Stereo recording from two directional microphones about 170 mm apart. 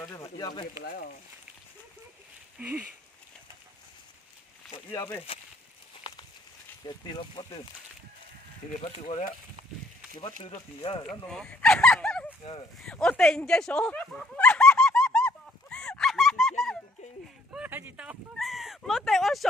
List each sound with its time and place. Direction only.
0.0 s speech: 15° left (ahead or behind)
0.8 s speech: 60° left (ahead or behind)
2.6 s a sound: 10° right (ahead or behind)
4.9 s speech: 15° left (ahead or behind)
6.8 s speech: 25° left (ahead or behind)
9.0 s speech: 40° left (ahead or behind)
10.4 s speech: 35° left (ahead or behind)
11.1 s speech: 5° left (ahead or behind)
12.8 s a sound: 5° left (ahead or behind)
17.6 s a sound: 10° right (ahead or behind)